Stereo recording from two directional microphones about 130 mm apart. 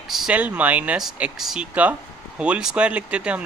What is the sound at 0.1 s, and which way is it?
Speech, 5° right (ahead or behind).